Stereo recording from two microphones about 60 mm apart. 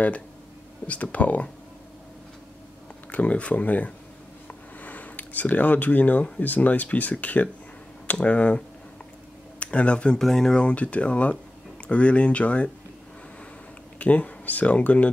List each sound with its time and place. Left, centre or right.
0.8 s speech: left
3.1 s speech: left
4.5 s a sound: left
6.4 s speech: left
13.9 s speech: left